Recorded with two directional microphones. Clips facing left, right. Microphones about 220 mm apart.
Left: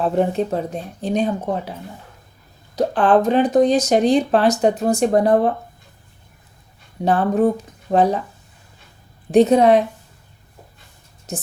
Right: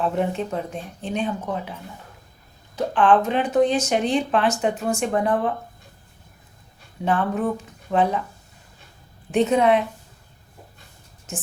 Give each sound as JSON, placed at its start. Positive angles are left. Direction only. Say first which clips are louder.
{"t": 0.0, "sound": "speech", "louder": "left 5 dB", "side_deg": 35}
{"t": 2.7, "sound": "speech", "louder": "left 3 dB", "side_deg": 40}
{"t": 7.0, "sound": "speech", "louder": "left 6 dB", "side_deg": 40}
{"t": 9.3, "sound": "speech", "louder": "left 6 dB", "side_deg": 40}
{"t": 11.3, "sound": "a woman's voice", "louder": "left 5 dB", "side_deg": 35}